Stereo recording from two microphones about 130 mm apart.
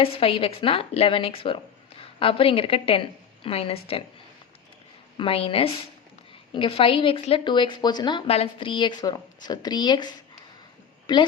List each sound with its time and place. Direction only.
0.0 s a woman's voice: 45° left (ahead or behind)
5.1 s a woman's voice: 45° left (ahead or behind)
8.3 s a woman's voice: 45° left (ahead or behind)
11.0 s a sound: 35° left (ahead or behind)